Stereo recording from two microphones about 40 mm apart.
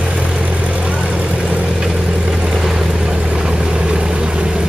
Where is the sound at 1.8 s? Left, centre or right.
Centre.